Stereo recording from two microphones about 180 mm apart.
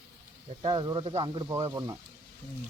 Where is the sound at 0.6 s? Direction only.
25° right (ahead or behind).